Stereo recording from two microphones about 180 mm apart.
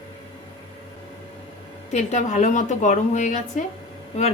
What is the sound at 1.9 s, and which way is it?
A woman's voice, 40° left (ahead or behind).